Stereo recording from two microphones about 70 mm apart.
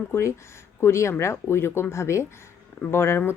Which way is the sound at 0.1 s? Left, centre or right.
Left.